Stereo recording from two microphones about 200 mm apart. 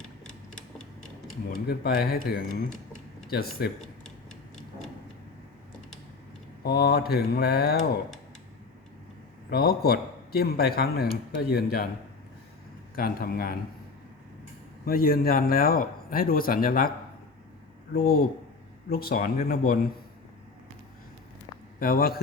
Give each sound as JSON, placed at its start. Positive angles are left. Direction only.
{"t": 1.5, "sound": "a man's voice", "side_deg": 50}
{"t": 6.6, "sound": "a man's voice", "side_deg": 55}
{"t": 9.5, "sound": "a man's voice", "side_deg": 50}
{"t": 13.0, "sound": "a man's voice", "side_deg": 45}
{"t": 14.8, "sound": "a man's voice", "side_deg": 50}
{"t": 17.9, "sound": "a man's voice", "side_deg": 50}
{"t": 21.8, "sound": "speech", "side_deg": 50}